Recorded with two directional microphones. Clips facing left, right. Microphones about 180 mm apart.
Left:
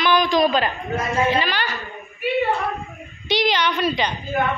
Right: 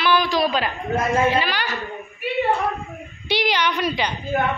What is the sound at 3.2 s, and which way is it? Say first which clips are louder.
Speech: left 1 dB; 10° right (ahead or behind).